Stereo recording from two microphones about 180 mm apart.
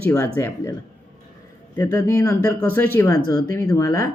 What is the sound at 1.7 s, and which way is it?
Speech, 20° left (ahead or behind).